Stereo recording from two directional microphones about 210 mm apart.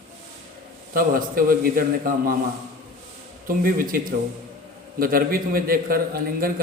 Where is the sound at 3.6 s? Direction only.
40° right (ahead or behind).